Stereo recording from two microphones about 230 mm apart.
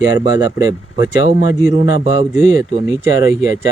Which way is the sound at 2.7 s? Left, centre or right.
Centre.